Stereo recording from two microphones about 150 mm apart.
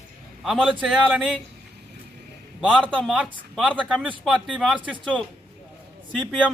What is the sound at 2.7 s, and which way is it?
A man's voice, 10° left (ahead or behind).